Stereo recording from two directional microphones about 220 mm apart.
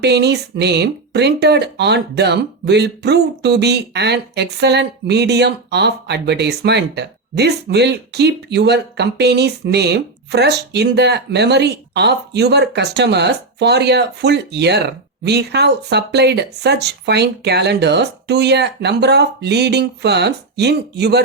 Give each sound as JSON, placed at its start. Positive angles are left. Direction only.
{"t": 0.0, "sound": "speech", "side_deg": -50}